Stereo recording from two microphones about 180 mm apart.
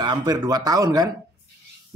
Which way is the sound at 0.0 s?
25° right (ahead or behind).